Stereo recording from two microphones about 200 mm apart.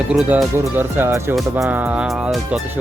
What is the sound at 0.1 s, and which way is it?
Speech, centre (ahead or behind).